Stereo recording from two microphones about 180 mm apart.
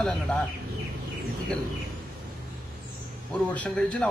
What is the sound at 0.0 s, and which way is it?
Speech, 5° left (ahead or behind).